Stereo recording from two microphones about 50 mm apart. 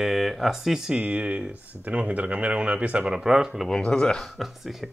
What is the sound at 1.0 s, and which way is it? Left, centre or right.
Speech, right.